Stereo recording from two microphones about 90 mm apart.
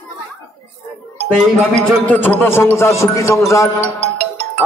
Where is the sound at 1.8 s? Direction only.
15° left (ahead or behind); by 3.6 s 35° left (ahead or behind).